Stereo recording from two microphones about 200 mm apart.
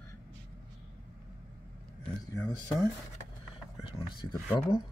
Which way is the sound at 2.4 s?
20° left (ahead or behind).